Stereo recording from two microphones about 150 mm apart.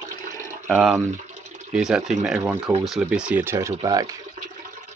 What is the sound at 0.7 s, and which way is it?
Speech, centre (ahead or behind).